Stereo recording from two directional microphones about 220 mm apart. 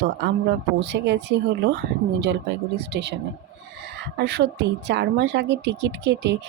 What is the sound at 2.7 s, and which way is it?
Speech, 50° right (ahead or behind).